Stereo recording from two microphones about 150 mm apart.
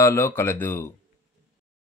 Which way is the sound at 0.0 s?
15° left (ahead or behind).